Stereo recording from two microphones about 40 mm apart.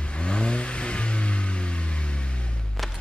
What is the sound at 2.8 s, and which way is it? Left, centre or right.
Music, centre.